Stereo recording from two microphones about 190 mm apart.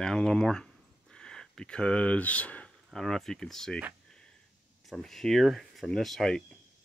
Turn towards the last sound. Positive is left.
turn(degrees=0)  # may be behind; listen again after turning